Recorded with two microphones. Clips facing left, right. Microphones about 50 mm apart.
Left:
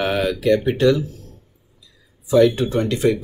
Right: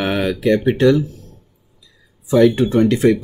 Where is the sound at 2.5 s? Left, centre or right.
Right.